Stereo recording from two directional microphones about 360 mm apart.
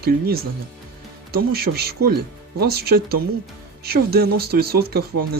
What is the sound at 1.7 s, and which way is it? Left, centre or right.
Speech, right.